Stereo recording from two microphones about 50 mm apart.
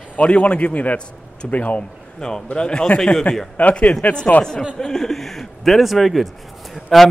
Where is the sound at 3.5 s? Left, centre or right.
Left.